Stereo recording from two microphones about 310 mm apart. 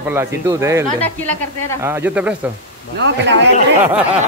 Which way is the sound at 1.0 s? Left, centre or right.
Centre.